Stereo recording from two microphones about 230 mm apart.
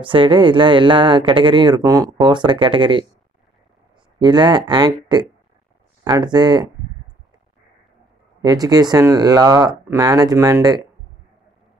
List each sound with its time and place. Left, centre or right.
0.0 s speech: right
4.2 s speech: centre
8.4 s speech: centre